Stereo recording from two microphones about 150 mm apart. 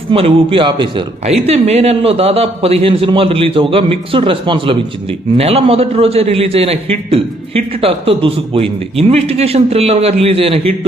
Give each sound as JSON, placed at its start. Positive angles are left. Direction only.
{"t": 0.1, "sound": "a man's voice", "side_deg": -40}
{"t": 1.2, "sound": "a man's voice", "side_deg": -45}